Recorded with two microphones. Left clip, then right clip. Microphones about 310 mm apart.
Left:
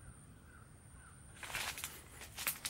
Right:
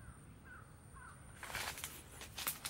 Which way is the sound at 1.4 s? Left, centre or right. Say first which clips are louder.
Left 2 dB; centre.